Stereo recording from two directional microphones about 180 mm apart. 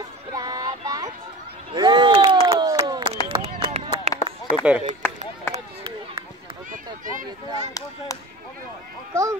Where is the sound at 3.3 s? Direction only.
35° right (ahead or behind).